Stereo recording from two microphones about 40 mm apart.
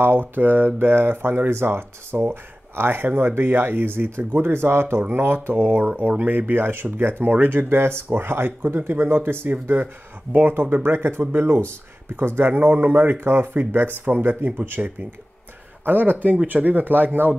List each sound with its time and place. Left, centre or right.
0.0 s speech: right
5.1 s speech: right
10.3 s speech: right
10.6 s speech: right
12.2 s speech: right
13.2 s speech: right
13.7 s speech: right